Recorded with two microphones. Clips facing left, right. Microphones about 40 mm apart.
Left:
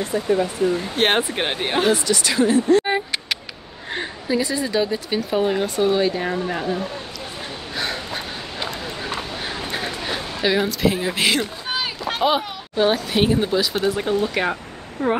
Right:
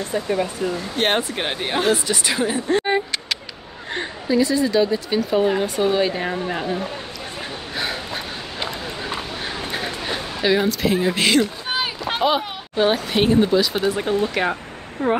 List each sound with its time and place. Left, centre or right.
0.1 s speech: right
0.9 s speech: left
1.3 s speech: centre
2.0 s speech: centre
2.8 s a sound: centre
3.9 s a woman's voice: centre
7.7 s a sound: centre
11.7 s a sound: centre
12.2 s a child's voice: centre